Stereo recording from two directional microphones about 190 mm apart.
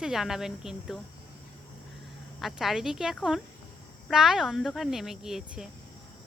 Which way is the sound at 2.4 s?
Centre (ahead or behind).